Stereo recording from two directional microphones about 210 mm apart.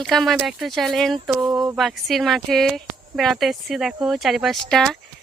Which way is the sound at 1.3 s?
15° right (ahead or behind).